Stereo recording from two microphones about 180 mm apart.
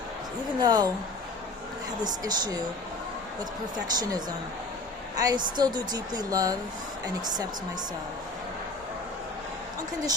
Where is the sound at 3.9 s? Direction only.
20° right (ahead or behind).